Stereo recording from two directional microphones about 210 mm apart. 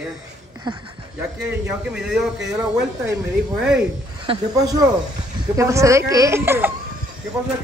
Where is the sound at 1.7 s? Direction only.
5° right (ahead or behind).